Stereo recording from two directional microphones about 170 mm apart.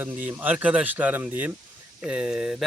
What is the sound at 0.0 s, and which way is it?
Speech, 10° right (ahead or behind).